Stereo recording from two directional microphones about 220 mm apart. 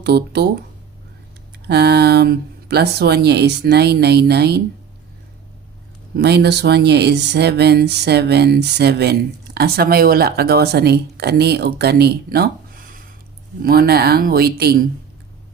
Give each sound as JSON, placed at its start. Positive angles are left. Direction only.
{"t": 0.0, "sound": "speech", "side_deg": -50}
{"t": 1.5, "sound": "speech", "side_deg": -50}
{"t": 6.1, "sound": "speech", "side_deg": -50}